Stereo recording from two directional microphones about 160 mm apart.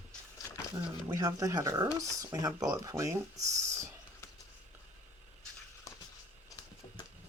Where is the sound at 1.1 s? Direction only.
20° right (ahead or behind).